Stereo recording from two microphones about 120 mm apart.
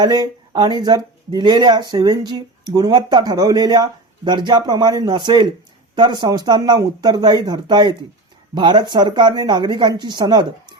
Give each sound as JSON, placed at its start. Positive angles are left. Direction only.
{"t": 0.0, "sound": "speech", "side_deg": -35}